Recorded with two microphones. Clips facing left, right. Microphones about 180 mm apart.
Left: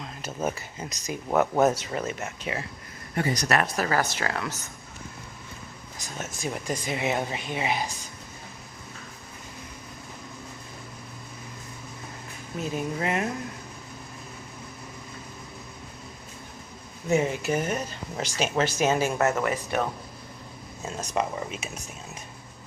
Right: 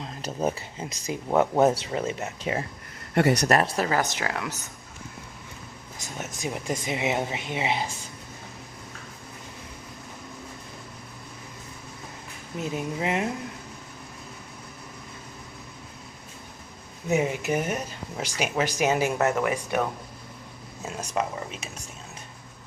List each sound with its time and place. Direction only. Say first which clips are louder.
0.0 s a sound: right 3 dB; 35° right (ahead or behind)
0.4 s speech: right 2 dB; 30° right (ahead or behind)
3.8 s speech: even; 20° right (ahead or behind)
6.0 s speech: even; 20° right (ahead or behind)
12.5 s speech: even; 20° right (ahead or behind)
17.1 s speech: even; 15° right (ahead or behind)
21.0 s speech: even; 10° right (ahead or behind)
21.3 s speech: left 2 dB; 5° left (ahead or behind)